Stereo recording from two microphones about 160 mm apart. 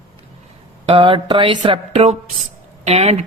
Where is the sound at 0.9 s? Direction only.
30° right (ahead or behind).